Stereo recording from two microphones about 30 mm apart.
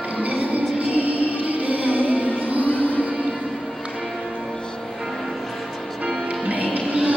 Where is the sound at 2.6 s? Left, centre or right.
Left.